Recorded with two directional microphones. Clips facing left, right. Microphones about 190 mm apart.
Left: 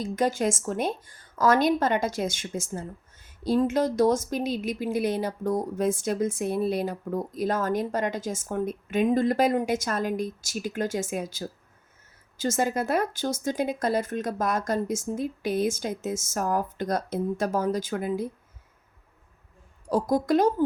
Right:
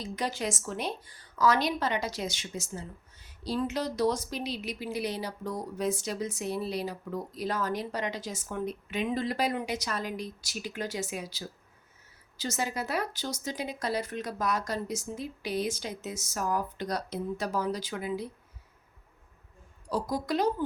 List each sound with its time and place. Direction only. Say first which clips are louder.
0.0 s speech: left 8 dB; 50° left (ahead or behind)
19.9 s speech: left 8 dB; 50° left (ahead or behind)